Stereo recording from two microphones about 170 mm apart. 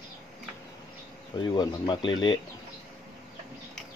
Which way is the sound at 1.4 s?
25° left (ahead or behind).